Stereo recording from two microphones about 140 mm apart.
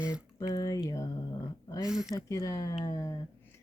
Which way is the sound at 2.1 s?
25° left (ahead or behind).